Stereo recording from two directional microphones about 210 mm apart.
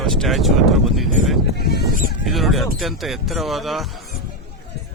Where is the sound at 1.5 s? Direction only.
50° left (ahead or behind).